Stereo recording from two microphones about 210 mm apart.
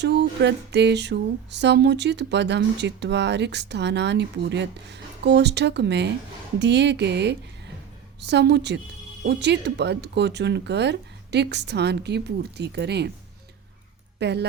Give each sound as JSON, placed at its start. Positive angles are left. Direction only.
{"t": 0.0, "sound": "a sound", "side_deg": -55}
{"t": 9.2, "sound": "speech", "side_deg": -55}
{"t": 14.2, "sound": "speech", "side_deg": -55}